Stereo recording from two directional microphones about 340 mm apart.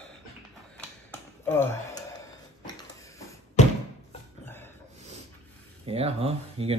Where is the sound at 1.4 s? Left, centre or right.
Centre.